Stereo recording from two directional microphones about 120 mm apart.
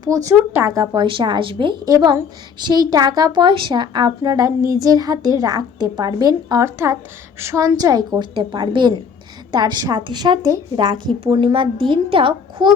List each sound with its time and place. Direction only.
0.0 s speech: 30° right (ahead or behind)
0.7 s a woman's voice: 30° right (ahead or behind)
1.0 s a woman's voice: 45° right (ahead or behind)
1.8 s a woman's voice: 35° right (ahead or behind)
6.7 s a woman's voice: 20° right (ahead or behind); by 12.7 s 45° right (ahead or behind)